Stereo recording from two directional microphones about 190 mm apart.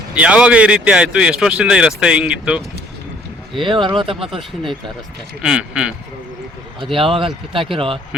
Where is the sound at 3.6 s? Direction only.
25° right (ahead or behind).